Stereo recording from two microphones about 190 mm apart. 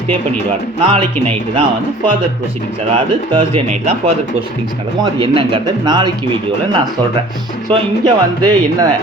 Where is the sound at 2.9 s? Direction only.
30° right (ahead or behind).